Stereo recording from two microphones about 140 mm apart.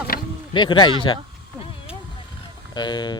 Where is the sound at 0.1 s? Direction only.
90° left.